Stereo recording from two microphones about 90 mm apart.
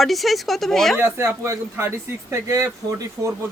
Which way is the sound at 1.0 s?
25° right (ahead or behind).